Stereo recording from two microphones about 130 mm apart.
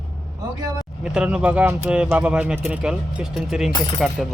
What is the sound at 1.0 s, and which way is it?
Speech, 5° right (ahead or behind).